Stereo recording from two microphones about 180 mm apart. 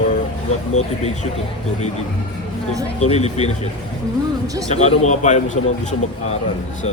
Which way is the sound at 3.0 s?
35° left (ahead or behind).